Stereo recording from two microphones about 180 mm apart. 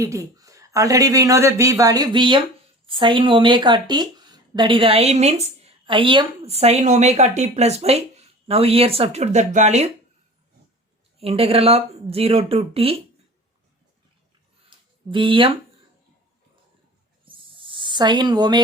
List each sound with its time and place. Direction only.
0.0 s speech: 15° right (ahead or behind); by 9.9 s 40° right (ahead or behind)
11.2 s speech: 35° right (ahead or behind)
14.7 s a sound: 30° right (ahead or behind)
17.2 s snake: 30° right (ahead or behind)